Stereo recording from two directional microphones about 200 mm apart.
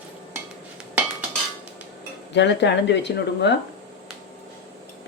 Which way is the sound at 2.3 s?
60° left (ahead or behind).